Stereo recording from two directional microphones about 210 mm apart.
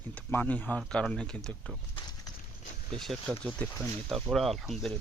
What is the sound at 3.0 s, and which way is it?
Speech, centre (ahead or behind).